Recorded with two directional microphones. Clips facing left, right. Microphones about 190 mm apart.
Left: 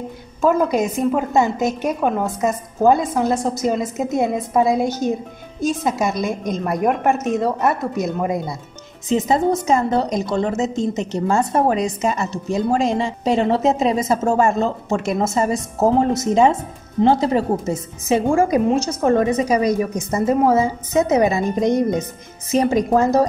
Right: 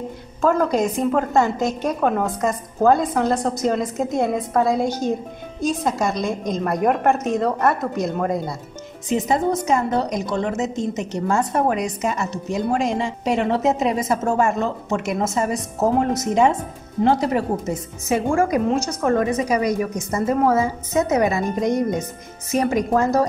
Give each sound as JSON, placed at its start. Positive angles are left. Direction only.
{"t": 0.4, "sound": "a woman's voice", "side_deg": 5}
{"t": 9.3, "sound": "a woman's voice", "side_deg": 30}